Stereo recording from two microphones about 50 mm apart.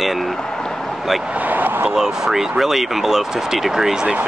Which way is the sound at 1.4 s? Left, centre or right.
Right.